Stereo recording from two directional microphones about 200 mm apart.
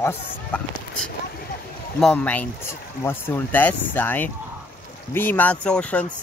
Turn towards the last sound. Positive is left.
turn(degrees=5)  # may be behind; listen again after turning